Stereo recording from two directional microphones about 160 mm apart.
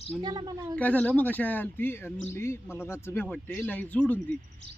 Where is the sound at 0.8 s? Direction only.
10° left (ahead or behind).